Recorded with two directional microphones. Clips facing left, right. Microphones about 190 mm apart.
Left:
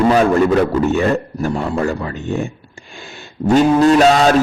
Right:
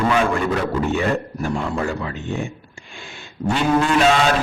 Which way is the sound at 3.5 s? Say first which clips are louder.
Left 8 dB; 40° left (ahead or behind).